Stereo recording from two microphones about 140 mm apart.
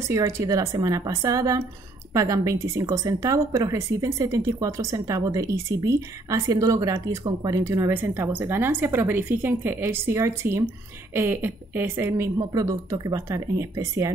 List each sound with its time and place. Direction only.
0.1 s a woman's voice: 25° right (ahead or behind)